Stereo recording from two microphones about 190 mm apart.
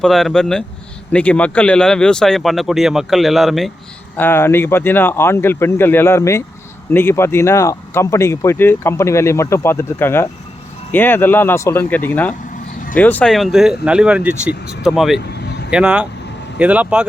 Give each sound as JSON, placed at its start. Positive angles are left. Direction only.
{"t": 0.0, "sound": "speech", "side_deg": 0}
{"t": 4.2, "sound": "speech", "side_deg": 10}
{"t": 15.2, "sound": "vehicle", "side_deg": 60}
{"t": 15.7, "sound": "speech", "side_deg": -5}